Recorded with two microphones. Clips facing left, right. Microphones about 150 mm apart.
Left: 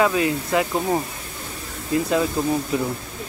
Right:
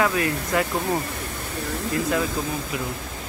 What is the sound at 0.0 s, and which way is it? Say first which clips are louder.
Speech: left 3 dB; 20° left (ahead or behind).